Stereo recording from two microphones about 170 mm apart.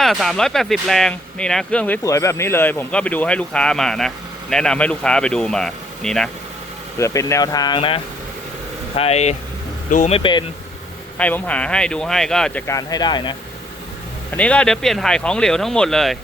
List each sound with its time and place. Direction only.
0.0 s speech: centre (ahead or behind)
2.0 s speech: 15° left (ahead or behind)
7.0 s speech: 15° left (ahead or behind)
11.2 s speech: 10° left (ahead or behind)
12.6 s speech: 20° left (ahead or behind)
14.3 s speech: 10° left (ahead or behind)